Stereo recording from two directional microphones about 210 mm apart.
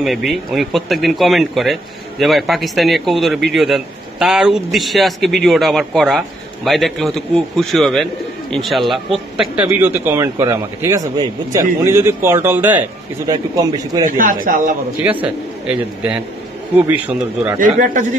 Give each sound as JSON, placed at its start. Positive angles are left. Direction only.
{"t": 0.0, "sound": "a man's voice", "side_deg": 0}
{"t": 14.0, "sound": "a man's voice", "side_deg": -40}
{"t": 15.2, "sound": "a man's voice", "side_deg": -5}